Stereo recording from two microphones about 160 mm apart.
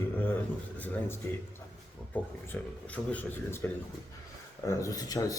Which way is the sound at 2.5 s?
10° left (ahead or behind).